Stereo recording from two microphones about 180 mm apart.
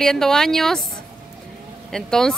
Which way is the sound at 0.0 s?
Centre (ahead or behind).